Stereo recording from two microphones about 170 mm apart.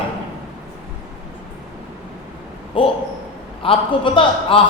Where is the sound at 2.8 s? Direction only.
30° left (ahead or behind).